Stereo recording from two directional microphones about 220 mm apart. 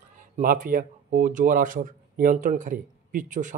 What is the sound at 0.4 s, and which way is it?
Speech, 40° right (ahead or behind).